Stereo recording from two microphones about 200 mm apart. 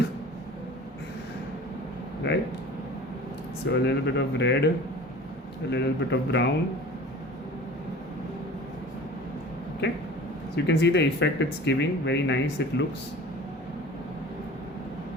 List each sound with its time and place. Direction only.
2.3 s speech: 60° left (ahead or behind)
3.8 s speech: 55° left (ahead or behind)
5.7 s speech: 60° left (ahead or behind)
9.8 s a sound: 60° left (ahead or behind)
10.5 s speech: 55° left (ahead or behind)